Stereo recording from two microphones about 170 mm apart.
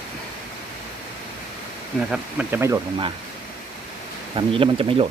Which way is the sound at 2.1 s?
10° right (ahead or behind).